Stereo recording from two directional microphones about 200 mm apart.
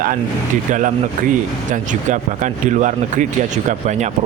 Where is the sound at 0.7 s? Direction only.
40° right (ahead or behind).